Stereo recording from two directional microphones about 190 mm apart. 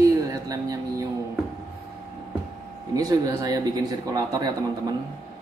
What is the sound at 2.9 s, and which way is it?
Speech, 20° right (ahead or behind).